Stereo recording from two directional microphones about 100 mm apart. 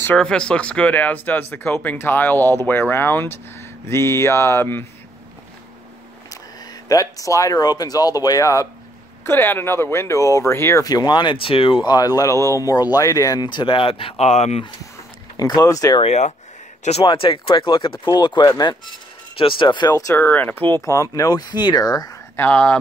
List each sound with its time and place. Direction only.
0.1 s speech: 10° left (ahead or behind)
6.9 s speech: 35° left (ahead or behind)
9.2 s speech: 20° left (ahead or behind); by 11.7 s 65° left (ahead or behind)
11.8 s speech: 40° left (ahead or behind); by 14.6 s 90° left
15.3 s speech: 40° left (ahead or behind)
17.0 s speech: 55° left (ahead or behind)
19.3 s speech: 60° left (ahead or behind)
19.9 s speech: 30° left (ahead or behind)
20.2 s speech: 15° left (ahead or behind)
20.8 s speech: 30° left (ahead or behind)
22.3 s speech: 20° left (ahead or behind)